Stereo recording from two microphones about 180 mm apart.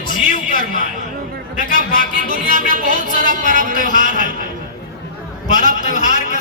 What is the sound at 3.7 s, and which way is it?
Speech, 45° left (ahead or behind).